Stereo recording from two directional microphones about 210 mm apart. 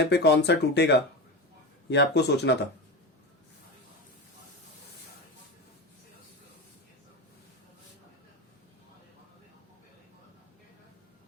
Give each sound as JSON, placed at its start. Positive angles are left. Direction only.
{"t": 0.1, "sound": "speech", "side_deg": 55}